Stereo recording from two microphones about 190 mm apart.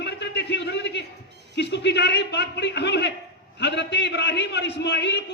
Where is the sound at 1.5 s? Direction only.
65° left (ahead or behind).